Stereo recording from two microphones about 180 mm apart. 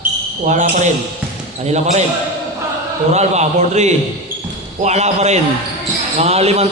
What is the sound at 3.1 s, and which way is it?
A man's voice, 40° right (ahead or behind).